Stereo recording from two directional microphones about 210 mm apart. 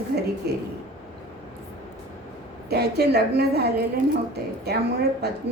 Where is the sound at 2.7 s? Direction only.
50° right (ahead or behind).